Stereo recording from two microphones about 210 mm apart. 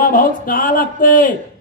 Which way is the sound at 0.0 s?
40° left (ahead or behind).